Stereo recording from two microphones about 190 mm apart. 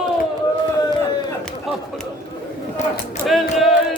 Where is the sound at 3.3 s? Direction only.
Centre (ahead or behind).